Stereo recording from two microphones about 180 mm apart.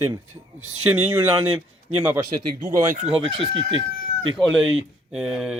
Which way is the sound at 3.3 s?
30° right (ahead or behind).